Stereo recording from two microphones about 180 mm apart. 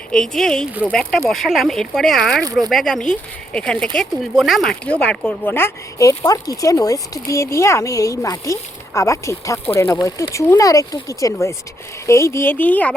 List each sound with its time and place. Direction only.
0.1 s speech: 5° left (ahead or behind)
2.4 s speech: 20° right (ahead or behind)
2.6 s speech: centre (ahead or behind)